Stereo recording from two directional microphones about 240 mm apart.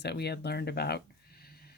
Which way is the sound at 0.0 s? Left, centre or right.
Left.